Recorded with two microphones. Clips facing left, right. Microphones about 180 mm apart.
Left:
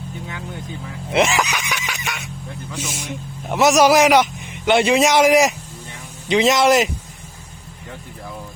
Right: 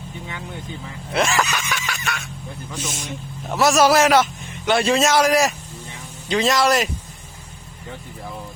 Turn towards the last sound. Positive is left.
turn(degrees=20)  # may be behind; listen again after turning